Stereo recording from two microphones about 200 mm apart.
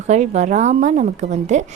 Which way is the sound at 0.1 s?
35° right (ahead or behind).